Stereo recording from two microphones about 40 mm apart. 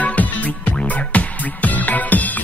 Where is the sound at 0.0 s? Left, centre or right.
Left.